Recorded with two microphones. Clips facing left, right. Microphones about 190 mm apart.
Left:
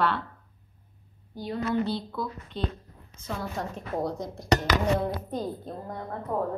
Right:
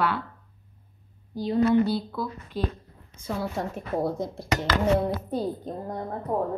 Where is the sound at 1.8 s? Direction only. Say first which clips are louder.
Right 4 dB; 5° right (ahead or behind).